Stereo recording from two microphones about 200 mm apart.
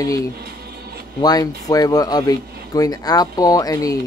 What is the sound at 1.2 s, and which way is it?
Speech, 20° left (ahead or behind).